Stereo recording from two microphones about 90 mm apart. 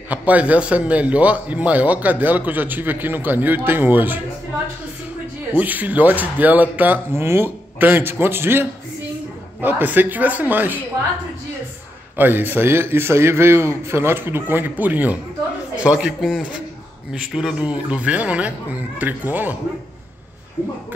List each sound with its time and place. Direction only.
0.1 s a man's voice: 15° right (ahead or behind)
5.6 s a man's voice: 20° right (ahead or behind)
12.2 s a man's voice: 20° right (ahead or behind)
15.8 s a man's voice: 10° right (ahead or behind)